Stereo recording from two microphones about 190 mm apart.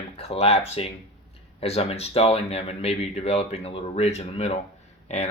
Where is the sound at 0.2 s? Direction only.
35° left (ahead or behind).